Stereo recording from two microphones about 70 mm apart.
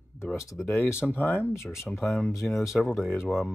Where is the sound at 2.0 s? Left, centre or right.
Centre.